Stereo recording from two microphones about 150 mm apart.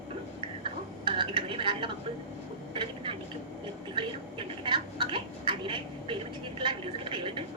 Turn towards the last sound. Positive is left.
turn(degrees=-35)  # may be behind; listen again after turning